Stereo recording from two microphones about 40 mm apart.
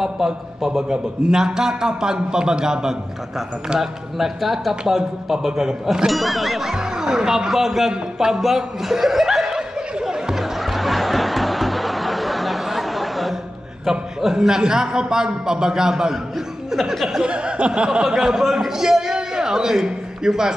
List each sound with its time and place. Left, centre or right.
0.0 s a man's voice: centre
6.0 s speech: centre
6.7 s a man's voice: centre
7.9 s chuckle: centre
10.4 s snicker: centre
13.8 s a man's voice: centre
17.2 s chuckle: right
18.0 s a man's voice: centre
19.1 s a sound: centre